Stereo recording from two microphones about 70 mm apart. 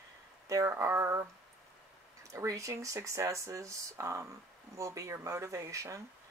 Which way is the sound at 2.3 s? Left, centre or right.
Right.